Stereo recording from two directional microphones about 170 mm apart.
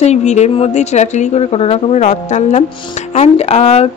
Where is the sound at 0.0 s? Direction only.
40° left (ahead or behind).